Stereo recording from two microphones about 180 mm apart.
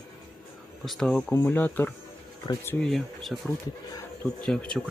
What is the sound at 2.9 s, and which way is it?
Speech, centre (ahead or behind).